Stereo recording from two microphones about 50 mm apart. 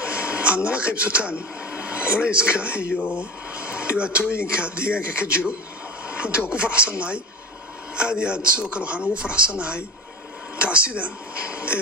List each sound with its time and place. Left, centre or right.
0.0 s a sound: right
0.7 s speech: right
6.0 s a sound: right
6.5 s speech: right
7.9 s speech: centre
11.0 s speech: right